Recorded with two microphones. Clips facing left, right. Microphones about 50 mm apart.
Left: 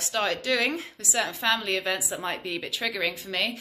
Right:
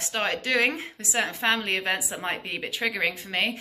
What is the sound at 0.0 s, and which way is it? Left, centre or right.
A woman's voice, right.